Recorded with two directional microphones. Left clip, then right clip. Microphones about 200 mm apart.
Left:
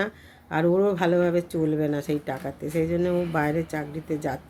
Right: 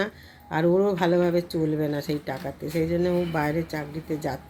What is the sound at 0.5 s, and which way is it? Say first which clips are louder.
Speech: even; 5° left (ahead or behind).